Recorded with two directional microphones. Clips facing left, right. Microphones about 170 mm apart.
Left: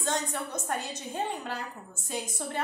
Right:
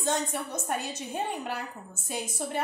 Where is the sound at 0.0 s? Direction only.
15° right (ahead or behind).